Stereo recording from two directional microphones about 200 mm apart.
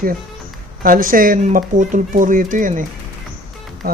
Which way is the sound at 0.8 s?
45° right (ahead or behind).